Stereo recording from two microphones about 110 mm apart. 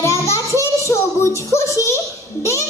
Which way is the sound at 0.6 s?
25° left (ahead or behind).